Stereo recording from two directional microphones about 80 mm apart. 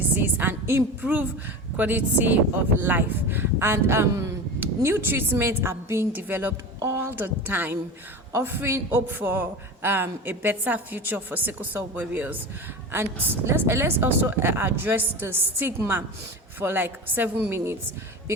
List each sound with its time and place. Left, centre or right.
0.2 s a sound: right
1.0 s a man's voice: right
13.5 s a man's voice: right